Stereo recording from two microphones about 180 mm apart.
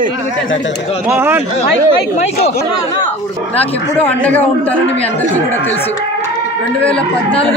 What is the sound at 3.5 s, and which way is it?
Speech, 35° left (ahead or behind).